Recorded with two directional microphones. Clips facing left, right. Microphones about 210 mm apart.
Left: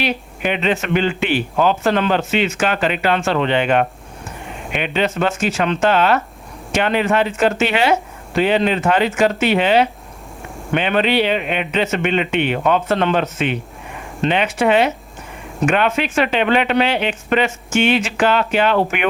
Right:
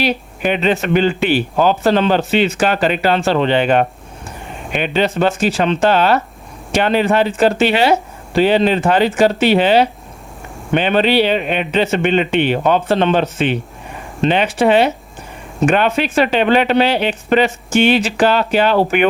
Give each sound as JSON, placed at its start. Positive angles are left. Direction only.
{"t": 0.0, "sound": "speech", "side_deg": -40}